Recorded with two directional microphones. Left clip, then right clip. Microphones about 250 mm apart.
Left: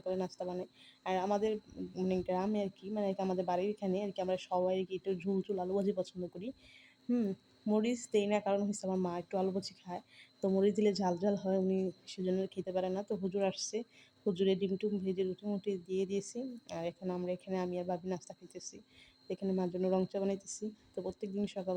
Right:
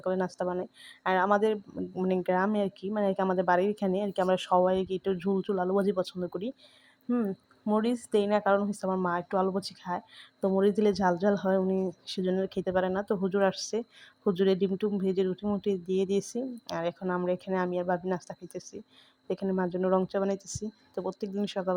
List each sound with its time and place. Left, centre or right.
0.0 s speech: centre
12.2 s speech: right
12.7 s speech: centre